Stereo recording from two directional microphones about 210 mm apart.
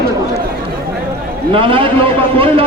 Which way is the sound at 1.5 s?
25° right (ahead or behind).